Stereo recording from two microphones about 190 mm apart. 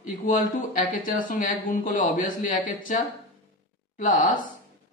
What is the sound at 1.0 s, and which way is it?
Speech, 45° left (ahead or behind).